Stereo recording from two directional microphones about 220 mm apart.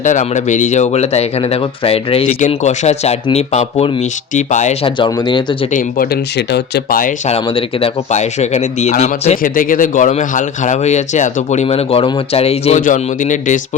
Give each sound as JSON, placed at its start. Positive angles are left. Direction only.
{"t": 0.0, "sound": "speech", "side_deg": 35}
{"t": 4.9, "sound": "speech", "side_deg": 20}
{"t": 5.7, "sound": "speech", "side_deg": 45}
{"t": 7.3, "sound": "speech", "side_deg": 25}